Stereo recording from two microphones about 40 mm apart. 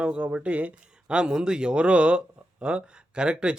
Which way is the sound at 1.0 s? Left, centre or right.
Right.